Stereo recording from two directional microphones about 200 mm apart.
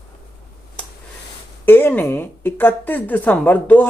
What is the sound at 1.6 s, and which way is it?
A woman's voice, 10° left (ahead or behind).